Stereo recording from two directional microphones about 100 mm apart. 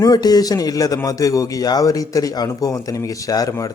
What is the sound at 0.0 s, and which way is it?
A man's voice, 40° left (ahead or behind).